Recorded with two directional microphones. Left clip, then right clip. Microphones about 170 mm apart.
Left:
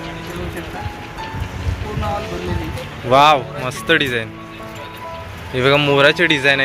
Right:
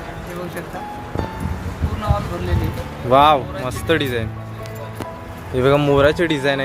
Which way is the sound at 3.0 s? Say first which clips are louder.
Left 1 dB; 5° right (ahead or behind).